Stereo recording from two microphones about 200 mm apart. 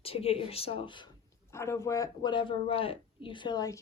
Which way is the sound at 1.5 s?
15° left (ahead or behind).